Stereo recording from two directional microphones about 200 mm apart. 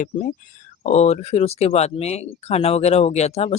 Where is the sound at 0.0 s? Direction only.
40° left (ahead or behind).